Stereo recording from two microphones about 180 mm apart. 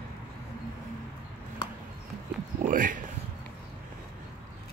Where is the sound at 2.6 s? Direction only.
50° right (ahead or behind).